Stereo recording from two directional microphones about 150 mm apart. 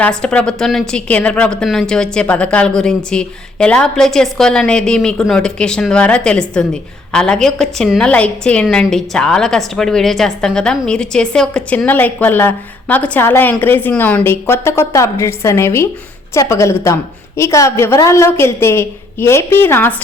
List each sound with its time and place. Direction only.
0.0 s a woman's voice: 5° left (ahead or behind)